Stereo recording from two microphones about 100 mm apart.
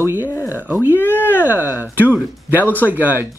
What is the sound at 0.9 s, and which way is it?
Speech, 20° left (ahead or behind).